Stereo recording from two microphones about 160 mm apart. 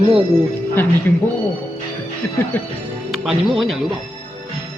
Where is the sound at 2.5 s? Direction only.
10° left (ahead or behind).